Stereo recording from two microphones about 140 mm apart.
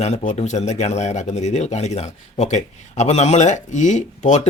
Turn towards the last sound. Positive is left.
turn(degrees=60)  # may be behind; listen again after turning